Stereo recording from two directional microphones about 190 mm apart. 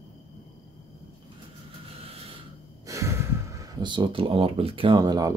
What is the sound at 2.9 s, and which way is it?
Gasp, 15° right (ahead or behind).